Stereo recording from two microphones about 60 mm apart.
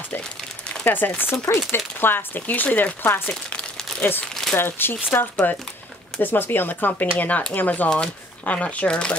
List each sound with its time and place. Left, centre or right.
0.8 s speech: left
3.3 s crumpling: centre
4.0 s speech: left
7.9 s speech: centre